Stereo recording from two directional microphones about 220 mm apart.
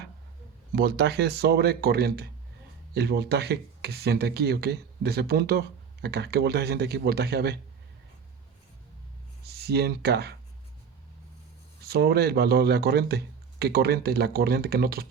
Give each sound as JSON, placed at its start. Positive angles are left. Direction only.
{"t": 0.7, "sound": "speech", "side_deg": -45}
{"t": 9.4, "sound": "speech", "side_deg": -45}
{"t": 11.9, "sound": "speech", "side_deg": -45}